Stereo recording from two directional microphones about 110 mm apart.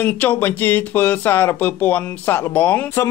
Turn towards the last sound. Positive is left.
turn(degrees=15)  # may be behind; listen again after turning